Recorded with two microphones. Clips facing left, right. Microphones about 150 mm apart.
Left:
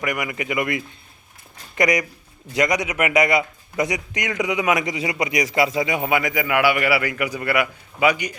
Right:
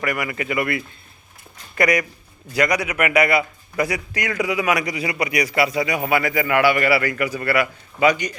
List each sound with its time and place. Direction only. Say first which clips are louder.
0.0 s a man's voice: right 1 dB; 15° left (ahead or behind)